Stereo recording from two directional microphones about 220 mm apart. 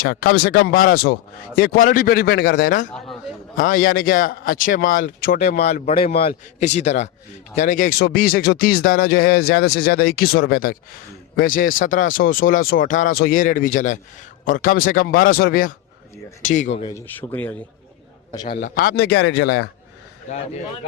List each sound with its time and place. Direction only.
0.0 s a man's voice: 40° left (ahead or behind)
16.8 s speech: 10° left (ahead or behind)
18.3 s speech: 25° left (ahead or behind); by 19.6 s 55° left (ahead or behind)